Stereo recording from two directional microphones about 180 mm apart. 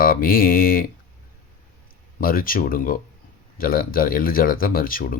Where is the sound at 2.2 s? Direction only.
50° left (ahead or behind).